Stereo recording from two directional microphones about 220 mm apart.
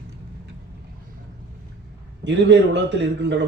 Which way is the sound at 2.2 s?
55° right (ahead or behind).